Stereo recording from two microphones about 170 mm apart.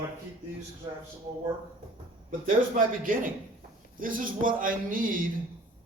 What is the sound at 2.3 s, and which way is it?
Speech, 50° right (ahead or behind).